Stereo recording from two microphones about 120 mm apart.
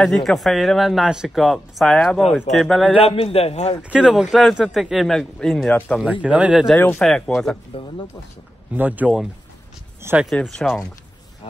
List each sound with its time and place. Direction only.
0.0 s speech: 5° left (ahead or behind)
3.0 s a man's voice: 55° left (ahead or behind)
3.9 s speech: 5° right (ahead or behind); by 5.9 s 10° left (ahead or behind)
6.2 s speech: 10° right (ahead or behind)
7.7 s speech: 50° left (ahead or behind)
8.7 s speech: 15° right (ahead or behind)
10.4 s speech: centre (ahead or behind)